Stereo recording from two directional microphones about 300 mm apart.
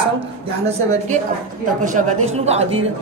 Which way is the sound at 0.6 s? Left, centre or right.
Right.